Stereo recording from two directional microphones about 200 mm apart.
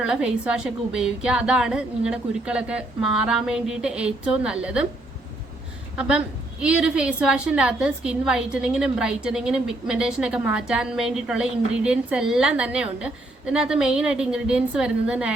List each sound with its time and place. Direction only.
0.0 s a woman's voice: 5° right (ahead or behind)
6.0 s a woman's voice: 5° right (ahead or behind)